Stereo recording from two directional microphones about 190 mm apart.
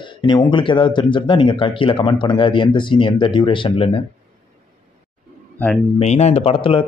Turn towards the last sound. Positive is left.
turn(degrees=30)  # may be behind; listen again after turning